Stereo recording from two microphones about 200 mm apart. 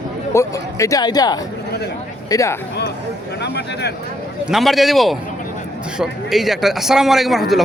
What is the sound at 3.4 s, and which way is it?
Speech, 55° left (ahead or behind).